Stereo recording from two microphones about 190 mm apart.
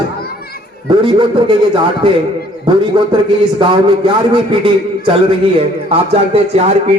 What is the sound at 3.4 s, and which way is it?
A man's voice, 25° right (ahead or behind).